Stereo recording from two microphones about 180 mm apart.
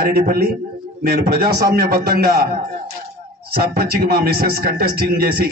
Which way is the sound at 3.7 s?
60° right (ahead or behind).